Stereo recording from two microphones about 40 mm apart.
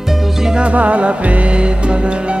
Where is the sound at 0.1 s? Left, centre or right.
Centre.